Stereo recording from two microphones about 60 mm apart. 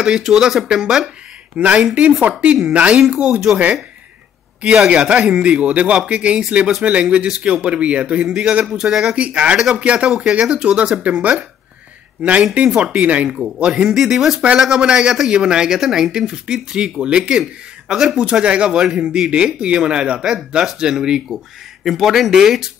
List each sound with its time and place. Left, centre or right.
0.0 s a man's voice: centre
4.8 s a man's voice: centre
9.1 s a man's voice: right